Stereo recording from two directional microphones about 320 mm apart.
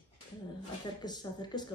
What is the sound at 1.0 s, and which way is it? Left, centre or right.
Speech, centre.